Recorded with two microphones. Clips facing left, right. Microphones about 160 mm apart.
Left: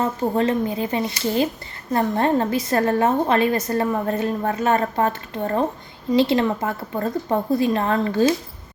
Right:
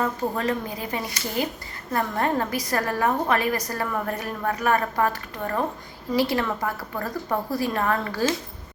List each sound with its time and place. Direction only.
0.0 s a woman's voice: 25° left (ahead or behind)